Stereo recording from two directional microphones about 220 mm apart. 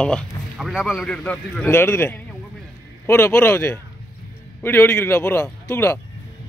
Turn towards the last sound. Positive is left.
turn(degrees=10)  # may be behind; listen again after turning